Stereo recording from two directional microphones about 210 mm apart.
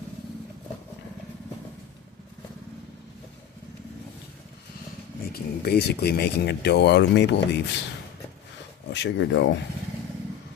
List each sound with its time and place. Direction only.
5.3 s speech: 50° left (ahead or behind)
8.9 s speech: 55° left (ahead or behind)